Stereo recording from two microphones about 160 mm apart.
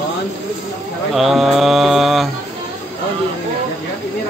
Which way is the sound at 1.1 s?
Centre (ahead or behind).